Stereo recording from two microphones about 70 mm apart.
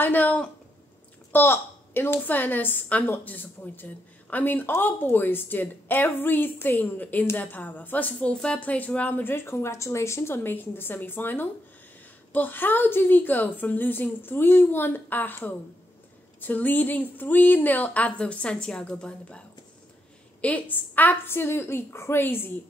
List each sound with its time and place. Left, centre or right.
0.0 s a woman's voice: left
20.4 s a woman's voice: left